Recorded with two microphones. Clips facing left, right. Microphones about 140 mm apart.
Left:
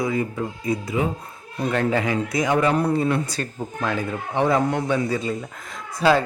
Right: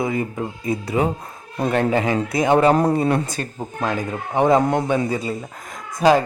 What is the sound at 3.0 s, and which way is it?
Speech, 40° right (ahead or behind).